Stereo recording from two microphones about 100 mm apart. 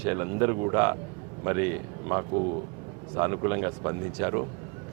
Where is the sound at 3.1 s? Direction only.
30° right (ahead or behind).